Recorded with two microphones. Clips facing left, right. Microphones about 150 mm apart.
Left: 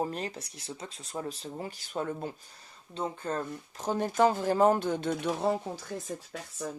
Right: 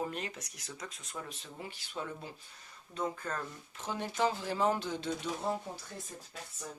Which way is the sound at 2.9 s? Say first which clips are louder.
Left 4 dB; 30° left (ahead or behind).